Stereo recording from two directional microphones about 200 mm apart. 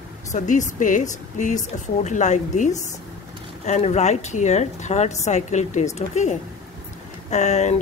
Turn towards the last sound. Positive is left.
turn(degrees=35)  # may be behind; listen again after turning